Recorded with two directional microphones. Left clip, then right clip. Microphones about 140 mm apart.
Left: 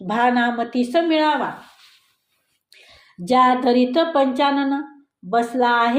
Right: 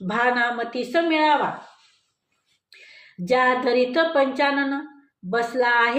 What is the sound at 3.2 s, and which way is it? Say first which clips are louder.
A woman's voice: left 4 dB; 35° left (ahead or behind).